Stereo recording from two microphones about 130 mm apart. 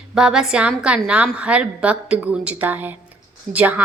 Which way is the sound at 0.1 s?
5° right (ahead or behind).